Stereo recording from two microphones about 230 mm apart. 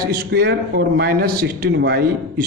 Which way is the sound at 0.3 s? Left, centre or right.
Right.